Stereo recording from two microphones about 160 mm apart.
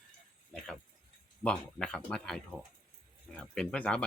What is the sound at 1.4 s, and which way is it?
Speech, 5° left (ahead or behind).